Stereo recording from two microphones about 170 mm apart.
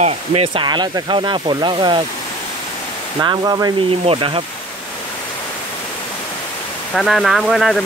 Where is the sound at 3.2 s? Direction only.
25° right (ahead or behind).